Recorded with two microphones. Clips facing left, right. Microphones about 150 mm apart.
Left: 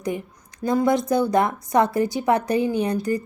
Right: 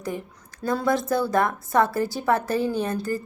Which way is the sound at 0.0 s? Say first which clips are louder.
Left 4 dB; 20° left (ahead or behind).